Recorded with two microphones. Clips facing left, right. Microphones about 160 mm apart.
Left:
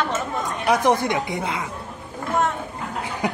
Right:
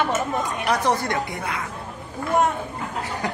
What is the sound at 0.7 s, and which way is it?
Speech, 15° left (ahead or behind).